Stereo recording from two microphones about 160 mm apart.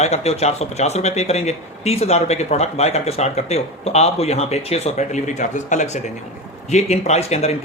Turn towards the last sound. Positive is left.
turn(degrees=40)  # may be behind; listen again after turning